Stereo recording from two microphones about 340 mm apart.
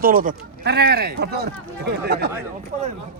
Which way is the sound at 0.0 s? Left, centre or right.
Right.